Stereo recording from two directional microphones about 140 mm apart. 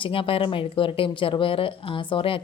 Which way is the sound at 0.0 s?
40° left (ahead or behind).